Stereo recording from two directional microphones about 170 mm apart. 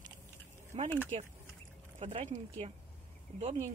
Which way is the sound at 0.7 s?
35° right (ahead or behind).